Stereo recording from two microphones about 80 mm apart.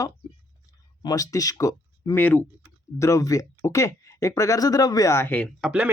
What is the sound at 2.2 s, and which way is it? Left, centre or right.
Speech, left.